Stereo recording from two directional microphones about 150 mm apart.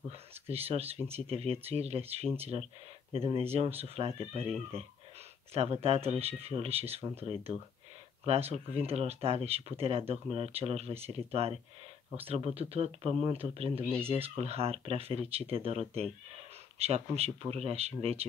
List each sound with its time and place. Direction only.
0.5 s speech: 40° right (ahead or behind)
5.5 s speech: 45° right (ahead or behind)